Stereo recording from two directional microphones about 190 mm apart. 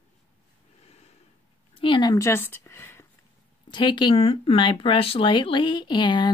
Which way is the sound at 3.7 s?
25° left (ahead or behind).